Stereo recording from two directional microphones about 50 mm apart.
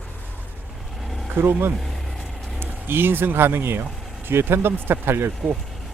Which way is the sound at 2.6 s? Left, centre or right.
Right.